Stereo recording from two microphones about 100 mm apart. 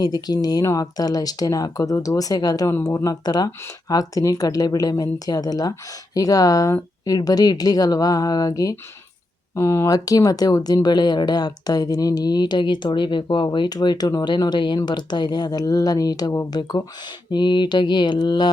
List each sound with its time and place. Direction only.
0.0 s speech: 45° left (ahead or behind)
9.6 s speech: 25° left (ahead or behind); by 18.4 s 50° left (ahead or behind)